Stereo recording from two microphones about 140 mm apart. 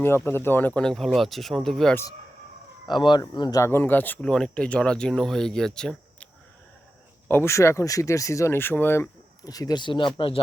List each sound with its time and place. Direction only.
0.0 s speech: 15° left (ahead or behind)
2.9 s speech: 35° left (ahead or behind); by 6.2 s 5° left (ahead or behind)
7.3 s speech: 15° left (ahead or behind); by 10.4 s 40° left (ahead or behind)